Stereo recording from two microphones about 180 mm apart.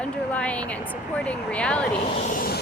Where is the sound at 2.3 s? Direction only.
55° left (ahead or behind).